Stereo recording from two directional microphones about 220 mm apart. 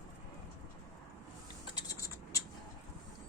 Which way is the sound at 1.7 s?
15° left (ahead or behind).